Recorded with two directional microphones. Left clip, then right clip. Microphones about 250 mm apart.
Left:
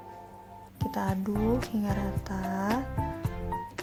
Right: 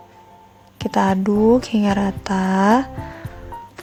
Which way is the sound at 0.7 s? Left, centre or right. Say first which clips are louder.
Right 14 dB; right.